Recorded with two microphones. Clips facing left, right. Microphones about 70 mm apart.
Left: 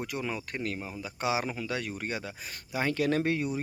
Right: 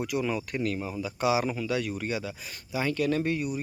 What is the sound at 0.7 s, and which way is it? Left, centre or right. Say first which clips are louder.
Speech: right 5 dB; centre.